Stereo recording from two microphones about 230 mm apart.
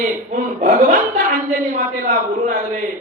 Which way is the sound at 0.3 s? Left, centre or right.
Right.